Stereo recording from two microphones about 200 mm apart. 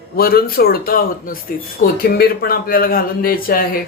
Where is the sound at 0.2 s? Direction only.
50° left (ahead or behind).